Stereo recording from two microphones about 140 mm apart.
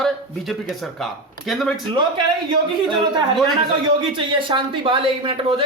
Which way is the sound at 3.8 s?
35° right (ahead or behind).